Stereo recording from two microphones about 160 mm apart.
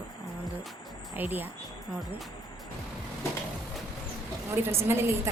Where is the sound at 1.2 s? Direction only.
10° right (ahead or behind).